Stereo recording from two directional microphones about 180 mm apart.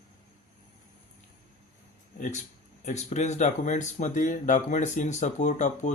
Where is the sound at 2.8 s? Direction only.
40° left (ahead or behind).